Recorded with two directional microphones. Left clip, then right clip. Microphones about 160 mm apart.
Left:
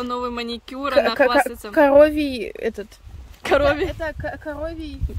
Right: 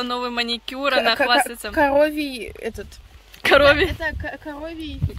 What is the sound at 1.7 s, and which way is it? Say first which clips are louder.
Speech: left 4 dB; 70° left (ahead or behind).